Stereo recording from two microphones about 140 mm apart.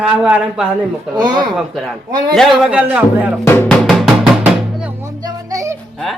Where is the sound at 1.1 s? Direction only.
30° right (ahead or behind).